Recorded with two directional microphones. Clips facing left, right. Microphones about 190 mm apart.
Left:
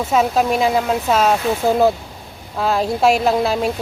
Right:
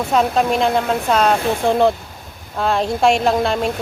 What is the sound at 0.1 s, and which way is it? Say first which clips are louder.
Speech: even; 5° left (ahead or behind).